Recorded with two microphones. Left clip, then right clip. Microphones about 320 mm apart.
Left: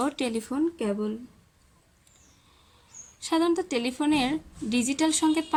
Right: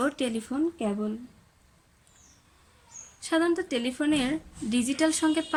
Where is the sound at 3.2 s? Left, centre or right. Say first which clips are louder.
Left 1 dB; centre.